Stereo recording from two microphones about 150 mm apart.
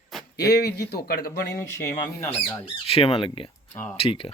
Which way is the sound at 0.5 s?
90° left.